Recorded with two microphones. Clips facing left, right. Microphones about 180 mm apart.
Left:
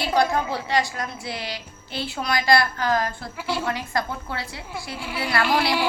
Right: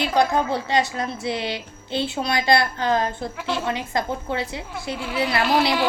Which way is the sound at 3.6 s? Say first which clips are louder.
Right 2 dB; 20° right (ahead or behind).